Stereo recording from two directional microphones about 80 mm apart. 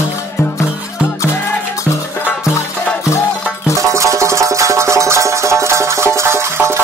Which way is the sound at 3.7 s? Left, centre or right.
Right.